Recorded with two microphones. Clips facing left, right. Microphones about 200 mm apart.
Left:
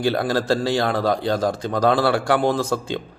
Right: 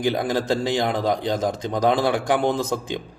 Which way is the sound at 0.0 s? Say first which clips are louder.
Left 1 dB; 15° right (ahead or behind).